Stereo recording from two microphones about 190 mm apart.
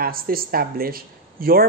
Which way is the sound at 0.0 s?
50° right (ahead or behind).